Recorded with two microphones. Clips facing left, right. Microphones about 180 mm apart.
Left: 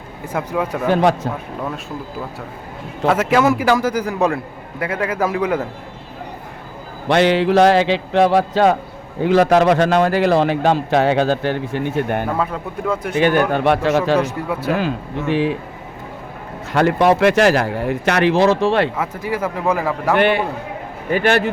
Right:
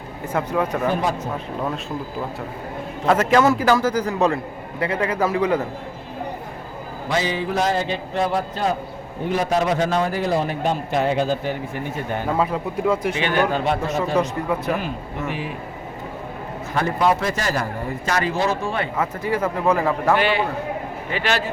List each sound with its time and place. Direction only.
0.3 s a man's voice: 10° left (ahead or behind)
0.9 s a man's voice: 85° left
3.1 s a man's voice: 5° left (ahead or behind)
7.1 s a man's voice: 70° left (ahead or behind)
12.4 s a man's voice: 10° right (ahead or behind)
13.0 s speech: 55° left (ahead or behind); by 14.2 s 90° left
14.2 s speech: 5° left (ahead or behind)
14.7 s speech: 90° left
16.7 s speech: 75° left (ahead or behind)
18.9 s a man's voice: 10° left (ahead or behind)
20.1 s speech: 55° left (ahead or behind)